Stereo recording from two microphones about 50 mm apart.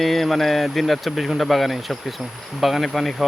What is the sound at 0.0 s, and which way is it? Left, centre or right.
Speech, centre.